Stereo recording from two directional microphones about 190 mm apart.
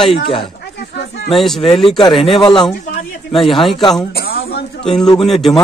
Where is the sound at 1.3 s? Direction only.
Centre (ahead or behind).